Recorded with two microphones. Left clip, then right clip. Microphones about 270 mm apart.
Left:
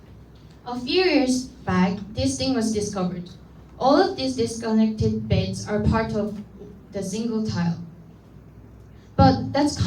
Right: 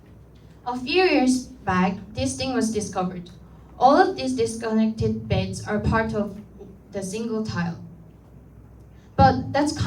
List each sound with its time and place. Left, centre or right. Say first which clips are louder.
0.6 s a woman's voice: right 1 dB; right
9.1 s a woman's voice: right 1 dB; right